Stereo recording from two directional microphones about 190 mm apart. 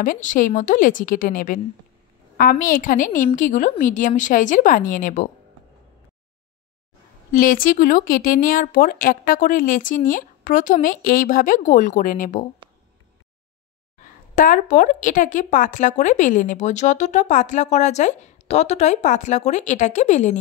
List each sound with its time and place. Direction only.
0.0 s speech: 45° left (ahead or behind)
7.3 s speech: 45° left (ahead or behind)
13.9 s a woman's voice: 45° left (ahead or behind)